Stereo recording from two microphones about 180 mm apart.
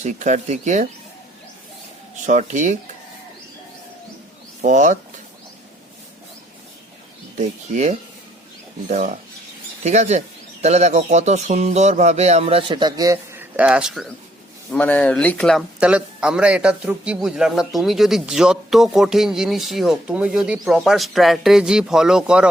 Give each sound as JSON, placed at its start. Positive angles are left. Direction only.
{"t": 0.0, "sound": "speech", "side_deg": -40}
{"t": 2.2, "sound": "speech", "side_deg": -40}
{"t": 4.6, "sound": "speech", "side_deg": -45}
{"t": 7.3, "sound": "speech", "side_deg": -45}
{"t": 13.6, "sound": "speech", "side_deg": -5}
{"t": 14.7, "sound": "speech", "side_deg": 10}